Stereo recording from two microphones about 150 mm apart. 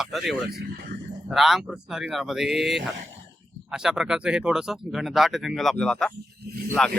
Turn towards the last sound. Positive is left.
turn(degrees=-90)